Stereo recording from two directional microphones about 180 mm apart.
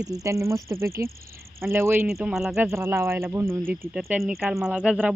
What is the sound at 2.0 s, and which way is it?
Speech, centre (ahead or behind).